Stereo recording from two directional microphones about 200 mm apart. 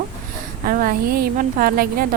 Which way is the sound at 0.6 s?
45° right (ahead or behind).